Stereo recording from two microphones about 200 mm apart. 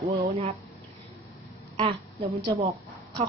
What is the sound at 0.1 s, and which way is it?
Speech, 30° right (ahead or behind).